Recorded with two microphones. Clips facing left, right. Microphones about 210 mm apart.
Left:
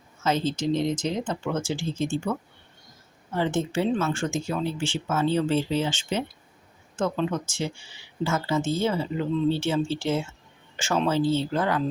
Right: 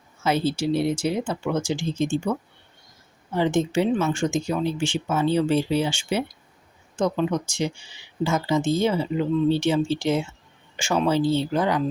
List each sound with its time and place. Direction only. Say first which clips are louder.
0.2 s speech: right 2 dB; 10° right (ahead or behind)
3.3 s speech: right 4 dB; 15° right (ahead or behind)